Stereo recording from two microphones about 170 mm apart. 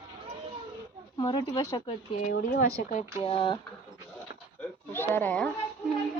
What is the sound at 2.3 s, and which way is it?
Speech, 60° left (ahead or behind).